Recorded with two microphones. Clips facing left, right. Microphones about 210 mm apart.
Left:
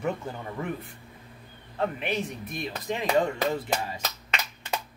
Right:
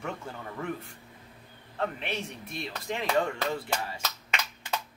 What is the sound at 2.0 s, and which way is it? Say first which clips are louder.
Speech: left 5 dB; 15° left (ahead or behind).